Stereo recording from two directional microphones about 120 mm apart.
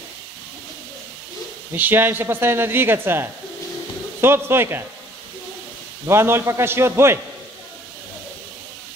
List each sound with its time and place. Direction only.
1.7 s speech: 15° right (ahead or behind)
6.0 s speech: 20° right (ahead or behind)